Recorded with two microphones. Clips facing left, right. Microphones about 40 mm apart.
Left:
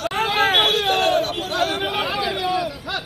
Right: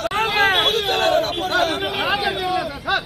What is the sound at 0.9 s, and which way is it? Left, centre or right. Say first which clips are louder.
Chatter: right 1 dB; right.